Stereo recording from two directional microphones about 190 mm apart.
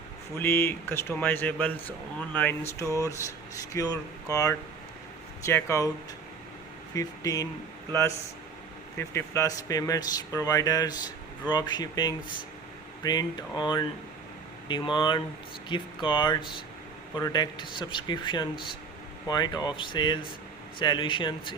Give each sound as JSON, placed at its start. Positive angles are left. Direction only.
{"t": 0.3, "sound": "speech", "side_deg": 10}
{"t": 6.9, "sound": "speech", "side_deg": 20}
{"t": 9.0, "sound": "speech", "side_deg": 15}